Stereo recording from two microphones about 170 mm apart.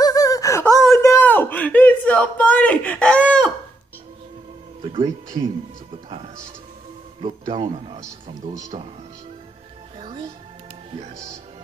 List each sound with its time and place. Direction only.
0.0 s gasp: 20° left (ahead or behind)
0.9 s a sound: 15° left (ahead or behind)
5.0 s speech: 20° right (ahead or behind)
7.2 s a man's voice: 35° right (ahead or behind)
9.9 s music: 30° right (ahead or behind)
11.0 s speech: 50° right (ahead or behind)